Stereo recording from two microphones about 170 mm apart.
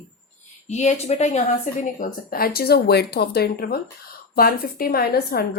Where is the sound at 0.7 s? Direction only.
40° left (ahead or behind).